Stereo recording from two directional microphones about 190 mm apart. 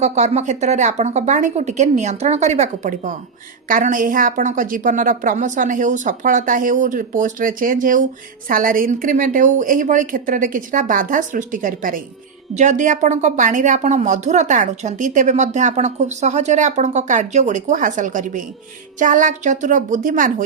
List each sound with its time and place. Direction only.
0.0 s a woman's voice: 35° right (ahead or behind)